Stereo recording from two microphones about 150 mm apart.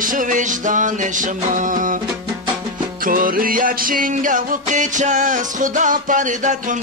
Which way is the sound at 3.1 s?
70° right (ahead or behind).